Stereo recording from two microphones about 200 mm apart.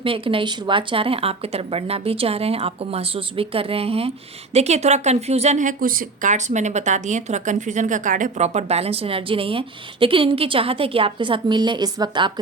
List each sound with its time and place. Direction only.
0.0 s speech: 25° right (ahead or behind)